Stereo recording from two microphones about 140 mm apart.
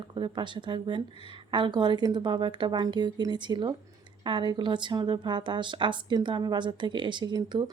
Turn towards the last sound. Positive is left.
turn(degrees=-30)  # may be behind; listen again after turning